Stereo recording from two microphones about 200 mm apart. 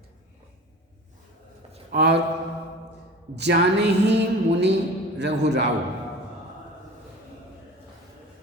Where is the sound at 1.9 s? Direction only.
55° right (ahead or behind).